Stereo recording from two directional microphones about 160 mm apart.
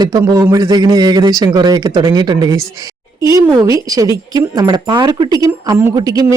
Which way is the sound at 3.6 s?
20° right (ahead or behind).